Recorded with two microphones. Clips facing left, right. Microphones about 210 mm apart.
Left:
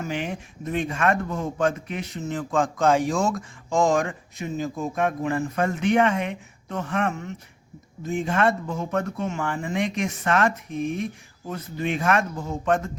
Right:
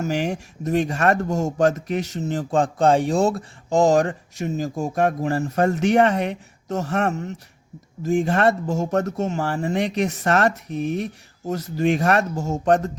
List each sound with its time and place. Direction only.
0.0 s speech: 40° right (ahead or behind)